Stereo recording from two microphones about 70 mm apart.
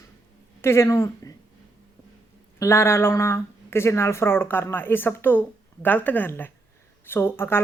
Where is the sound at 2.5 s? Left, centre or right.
Left.